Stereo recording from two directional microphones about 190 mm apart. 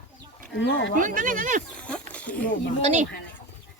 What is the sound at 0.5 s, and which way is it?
Speech, 70° left (ahead or behind).